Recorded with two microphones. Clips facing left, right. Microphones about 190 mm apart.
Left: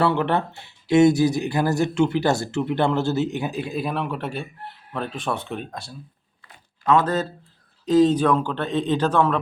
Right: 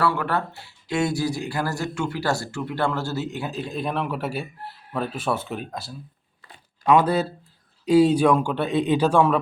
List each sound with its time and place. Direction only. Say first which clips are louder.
0.0 s speech: left 3 dB; 25° left (ahead or behind)
3.7 s speech: left 1 dB; 5° left (ahead or behind)